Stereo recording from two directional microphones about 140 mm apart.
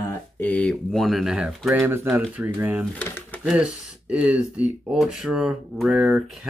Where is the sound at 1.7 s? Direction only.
15° right (ahead or behind).